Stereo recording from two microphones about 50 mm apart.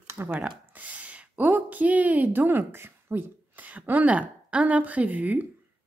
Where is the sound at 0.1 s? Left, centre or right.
Right.